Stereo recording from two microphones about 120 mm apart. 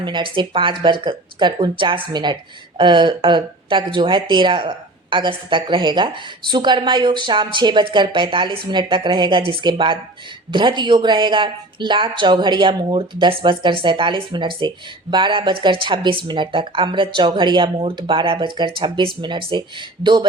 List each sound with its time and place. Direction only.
0.0 s speech: 40° right (ahead or behind)